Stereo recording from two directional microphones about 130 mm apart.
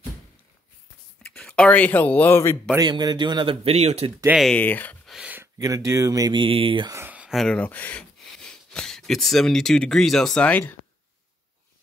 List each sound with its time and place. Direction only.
1.2 s speech: 10° left (ahead or behind)
2.8 s speech: 35° right (ahead or behind)
3.6 s speech: 50° right (ahead or behind)
4.5 s speech: 15° left (ahead or behind)
5.0 s a sound: centre (ahead or behind)
5.3 s speech: 25° right (ahead or behind); by 6.9 s 40° right (ahead or behind)
6.9 s a sound: 15° right (ahead or behind)
7.3 s speech: 5° left (ahead or behind)